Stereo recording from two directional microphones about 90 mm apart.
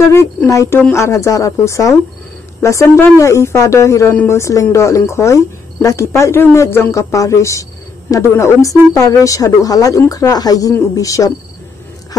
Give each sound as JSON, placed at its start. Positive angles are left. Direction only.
{"t": 0.5, "sound": "speech", "side_deg": 35}